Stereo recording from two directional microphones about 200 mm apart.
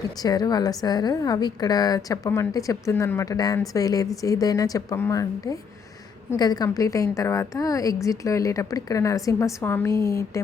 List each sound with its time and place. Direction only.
0.2 s a woman's voice: 20° left (ahead or behind)